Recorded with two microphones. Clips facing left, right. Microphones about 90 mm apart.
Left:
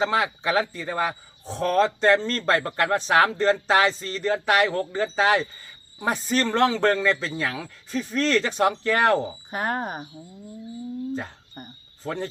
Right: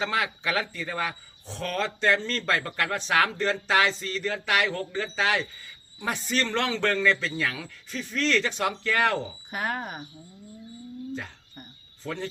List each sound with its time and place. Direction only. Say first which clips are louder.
0.0 s speech: left 5 dB; 30° left (ahead or behind)
11.1 s cricket: left 5 dB; 40° left (ahead or behind)